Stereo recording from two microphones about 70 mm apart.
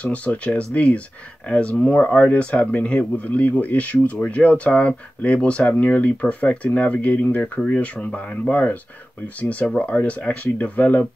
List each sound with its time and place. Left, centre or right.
0.0 s speech: centre